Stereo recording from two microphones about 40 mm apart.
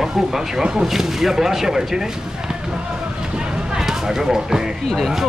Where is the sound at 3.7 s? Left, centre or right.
Centre.